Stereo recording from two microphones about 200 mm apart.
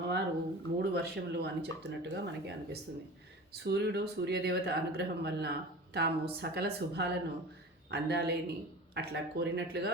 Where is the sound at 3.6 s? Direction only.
55° right (ahead or behind).